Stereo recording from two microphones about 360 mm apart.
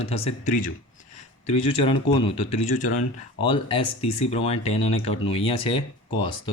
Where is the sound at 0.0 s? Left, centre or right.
Centre.